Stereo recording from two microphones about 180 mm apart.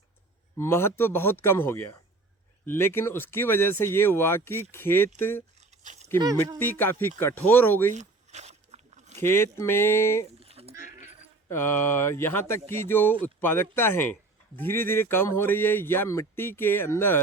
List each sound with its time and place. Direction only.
0.6 s speech: 15° left (ahead or behind)
5.5 s a sound: 40° right (ahead or behind)
6.1 s speech: 25° right (ahead or behind)
6.6 s speech: 10° left (ahead or behind)
7.9 s a sound: 40° right (ahead or behind)
9.1 s speech: 15° left (ahead or behind)
10.4 s sheep: 35° right (ahead or behind)
11.4 s speech: 15° left (ahead or behind)